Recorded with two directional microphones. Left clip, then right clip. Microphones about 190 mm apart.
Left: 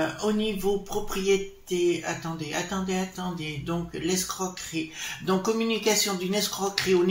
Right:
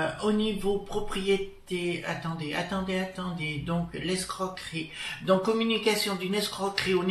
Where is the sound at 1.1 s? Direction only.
45° left (ahead or behind).